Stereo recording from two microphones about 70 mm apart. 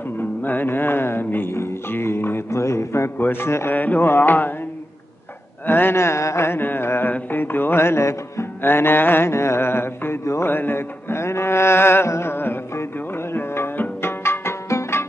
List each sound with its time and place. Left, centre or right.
0.4 s music: left
3.2 s music: left
3.7 s music: left
5.7 s music: left
10.2 s music: left
10.5 s music: left
13.3 s tabla: left